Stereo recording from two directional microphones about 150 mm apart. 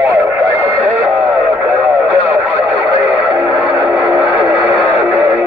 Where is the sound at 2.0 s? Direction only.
10° right (ahead or behind).